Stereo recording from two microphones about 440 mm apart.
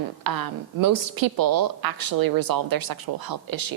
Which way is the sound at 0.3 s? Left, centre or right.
Right.